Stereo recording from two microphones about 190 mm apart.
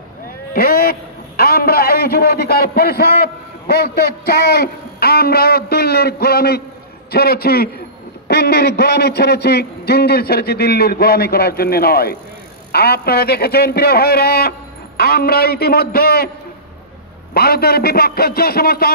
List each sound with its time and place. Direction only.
0.5 s a man's voice: 55° left (ahead or behind)
17.3 s a man's voice: 55° left (ahead or behind)